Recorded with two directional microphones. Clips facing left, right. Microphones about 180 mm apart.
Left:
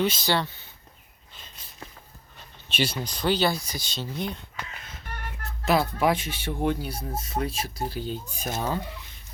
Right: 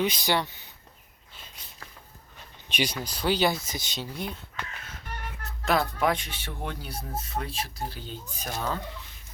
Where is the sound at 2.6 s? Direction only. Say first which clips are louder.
Left 2 dB; 15° right (ahead or behind).